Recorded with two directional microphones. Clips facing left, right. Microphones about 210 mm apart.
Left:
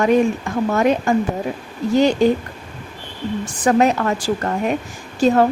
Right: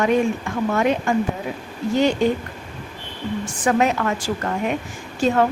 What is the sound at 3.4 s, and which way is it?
Speech, 35° left (ahead or behind).